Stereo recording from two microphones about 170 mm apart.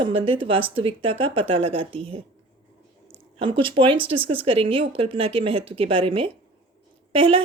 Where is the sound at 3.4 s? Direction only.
30° right (ahead or behind).